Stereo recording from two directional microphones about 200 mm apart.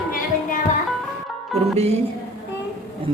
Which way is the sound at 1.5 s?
Centre (ahead or behind).